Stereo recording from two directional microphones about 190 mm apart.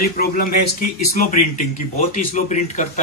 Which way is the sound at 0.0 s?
50° left (ahead or behind).